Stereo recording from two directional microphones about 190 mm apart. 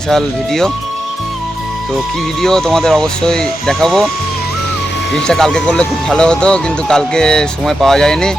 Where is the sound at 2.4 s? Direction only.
5° left (ahead or behind).